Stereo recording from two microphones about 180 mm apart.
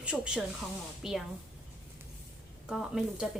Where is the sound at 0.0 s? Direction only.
5° right (ahead or behind).